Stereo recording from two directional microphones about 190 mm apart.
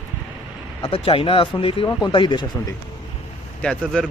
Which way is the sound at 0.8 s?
30° left (ahead or behind).